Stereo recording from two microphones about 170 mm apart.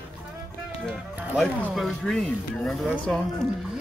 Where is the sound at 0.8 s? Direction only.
Centre (ahead or behind).